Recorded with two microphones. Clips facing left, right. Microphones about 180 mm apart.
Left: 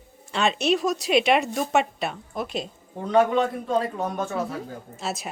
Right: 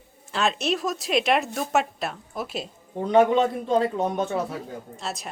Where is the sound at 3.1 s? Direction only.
20° right (ahead or behind).